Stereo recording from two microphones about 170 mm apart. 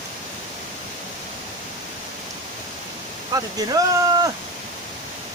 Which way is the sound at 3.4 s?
20° right (ahead or behind).